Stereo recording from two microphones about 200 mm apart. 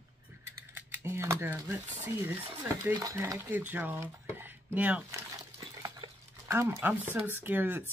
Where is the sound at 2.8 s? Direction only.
15° right (ahead or behind).